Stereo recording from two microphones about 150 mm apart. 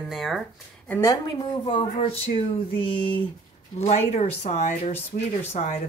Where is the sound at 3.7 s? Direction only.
45° left (ahead or behind).